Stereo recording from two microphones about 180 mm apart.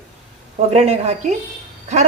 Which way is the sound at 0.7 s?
35° right (ahead or behind).